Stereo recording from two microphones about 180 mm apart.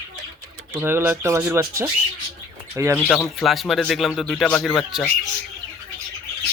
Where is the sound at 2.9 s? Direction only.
5° left (ahead or behind).